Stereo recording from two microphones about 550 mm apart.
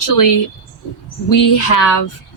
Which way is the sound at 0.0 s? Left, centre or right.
Left.